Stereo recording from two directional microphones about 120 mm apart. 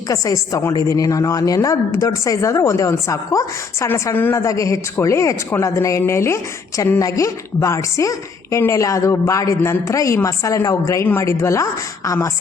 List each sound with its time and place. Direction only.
0.1 s speech: 30° left (ahead or behind)